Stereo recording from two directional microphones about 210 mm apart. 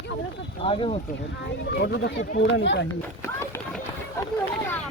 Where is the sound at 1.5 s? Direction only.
55° left (ahead or behind).